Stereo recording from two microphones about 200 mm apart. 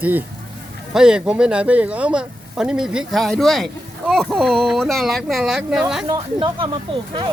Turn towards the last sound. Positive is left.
turn(degrees=-25)  # may be behind; listen again after turning